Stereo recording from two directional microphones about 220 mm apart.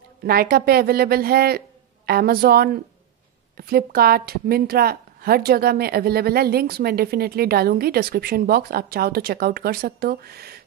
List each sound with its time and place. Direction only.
0.2 s a woman's voice: 45° right (ahead or behind)